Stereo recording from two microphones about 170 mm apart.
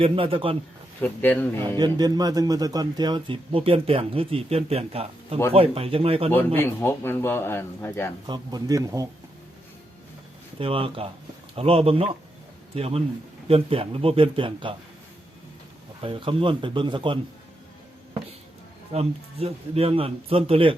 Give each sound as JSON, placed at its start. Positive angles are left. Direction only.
{"t": 0.0, "sound": "speech", "side_deg": -30}
{"t": 1.0, "sound": "a man's voice", "side_deg": 10}
{"t": 1.8, "sound": "speech", "side_deg": -25}
{"t": 6.3, "sound": "a man's voice", "side_deg": 10}
{"t": 8.3, "sound": "a man's voice", "side_deg": -20}
{"t": 10.6, "sound": "speech", "side_deg": -30}
{"t": 16.0, "sound": "speech", "side_deg": -30}
{"t": 18.9, "sound": "speech", "side_deg": -35}